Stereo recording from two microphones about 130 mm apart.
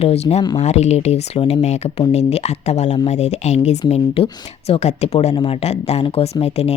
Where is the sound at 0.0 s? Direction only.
55° left (ahead or behind).